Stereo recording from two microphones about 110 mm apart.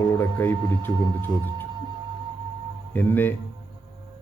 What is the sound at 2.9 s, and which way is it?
Speech, 15° left (ahead or behind).